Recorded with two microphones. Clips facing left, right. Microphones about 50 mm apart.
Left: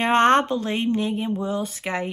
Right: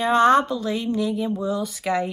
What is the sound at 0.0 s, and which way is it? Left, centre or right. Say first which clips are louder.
Speech: right 1 dB; left.